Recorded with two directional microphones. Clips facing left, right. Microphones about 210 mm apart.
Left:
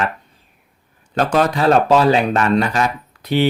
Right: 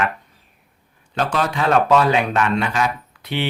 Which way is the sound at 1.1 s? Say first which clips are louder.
Left 5 dB; 40° left (ahead or behind).